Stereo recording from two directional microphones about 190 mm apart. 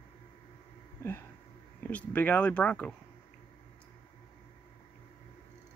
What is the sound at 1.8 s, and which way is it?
Speech, 10° left (ahead or behind).